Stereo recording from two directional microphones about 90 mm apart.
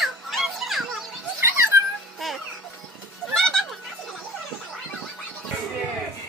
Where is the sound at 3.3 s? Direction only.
5° left (ahead or behind).